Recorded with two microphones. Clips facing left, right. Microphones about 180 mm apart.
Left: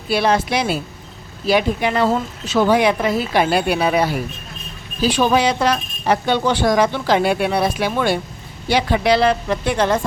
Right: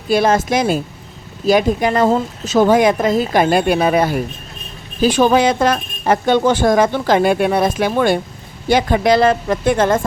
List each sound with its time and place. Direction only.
0.1 s speech: 45° right (ahead or behind)